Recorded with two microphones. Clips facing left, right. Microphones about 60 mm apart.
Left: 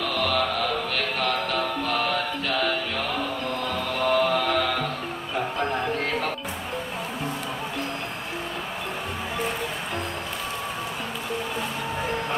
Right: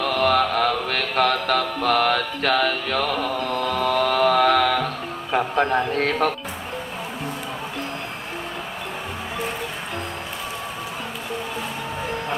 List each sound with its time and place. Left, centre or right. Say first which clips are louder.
0.0 s music: right 5 dB; right
1.3 s music: right 4 dB; right
3.5 s chant: right 6 dB; right
5.3 s music: right 7 dB; right
5.9 s speech: right 5 dB; right